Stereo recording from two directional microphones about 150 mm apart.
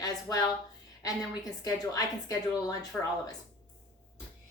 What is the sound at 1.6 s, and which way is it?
Speech, 25° left (ahead or behind).